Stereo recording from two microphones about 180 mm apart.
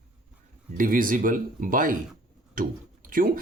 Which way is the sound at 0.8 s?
50° right (ahead or behind).